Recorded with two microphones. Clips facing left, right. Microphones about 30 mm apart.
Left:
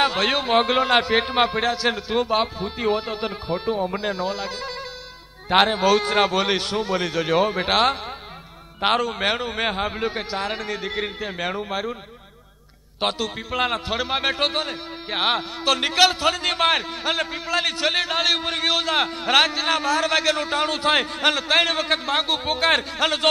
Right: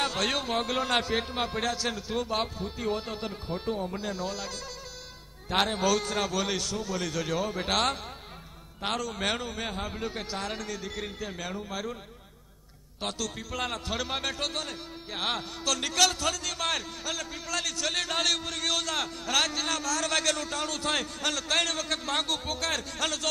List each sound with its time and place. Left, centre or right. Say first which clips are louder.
0.0 s a man's voice: left 8 dB; left
1.6 s a man's voice: left 8 dB; left
8.8 s a man's voice: left 9 dB; left
13.0 s a man's voice: left 9 dB; left
18.4 s a man's voice: left 8 dB; left